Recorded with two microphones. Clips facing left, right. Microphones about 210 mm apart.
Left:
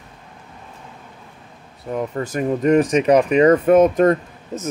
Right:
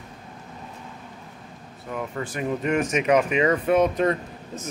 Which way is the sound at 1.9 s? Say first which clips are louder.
Left 6 dB; 40° left (ahead or behind).